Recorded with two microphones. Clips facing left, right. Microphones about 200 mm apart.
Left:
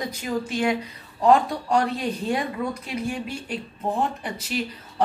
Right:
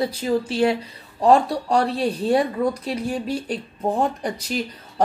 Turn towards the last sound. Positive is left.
turn(degrees=-40)  # may be behind; listen again after turning